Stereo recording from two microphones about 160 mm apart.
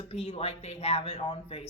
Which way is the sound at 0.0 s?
40° left (ahead or behind).